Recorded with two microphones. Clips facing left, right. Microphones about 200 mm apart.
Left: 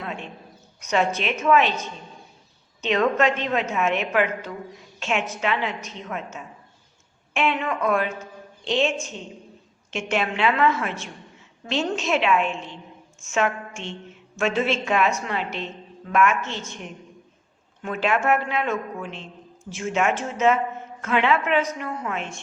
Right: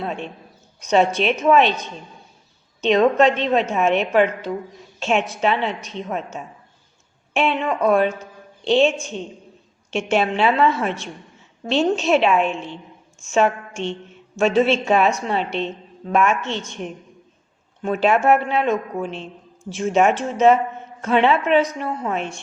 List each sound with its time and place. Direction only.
0.8 s a woman's voice: 35° right (ahead or behind)
10.1 s a woman's voice: 30° right (ahead or behind)
17.8 s a woman's voice: 35° right (ahead or behind)